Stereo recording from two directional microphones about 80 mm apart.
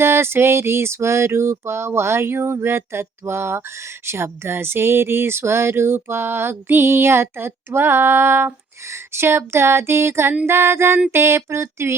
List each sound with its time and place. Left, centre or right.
0.0 s music: right